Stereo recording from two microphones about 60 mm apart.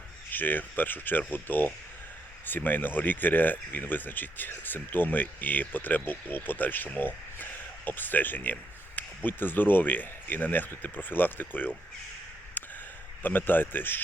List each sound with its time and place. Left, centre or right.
0.3 s speech: left
12.6 s a sound: left
13.2 s speech: left